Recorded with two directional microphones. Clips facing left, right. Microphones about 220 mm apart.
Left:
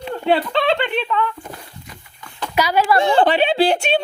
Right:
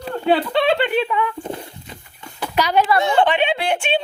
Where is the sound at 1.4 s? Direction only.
25° right (ahead or behind).